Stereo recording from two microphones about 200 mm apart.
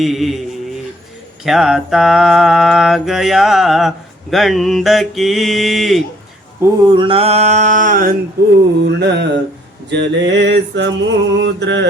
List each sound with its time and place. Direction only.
0.0 s mantra: centre (ahead or behind)
1.5 s mantra: centre (ahead or behind)
6.6 s a sound: 20° right (ahead or behind); by 8.5 s 50° right (ahead or behind)
9.0 s mantra: 60° right (ahead or behind)